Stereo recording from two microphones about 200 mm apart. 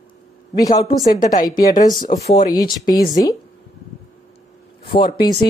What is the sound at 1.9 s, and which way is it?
Speech, 40° left (ahead or behind).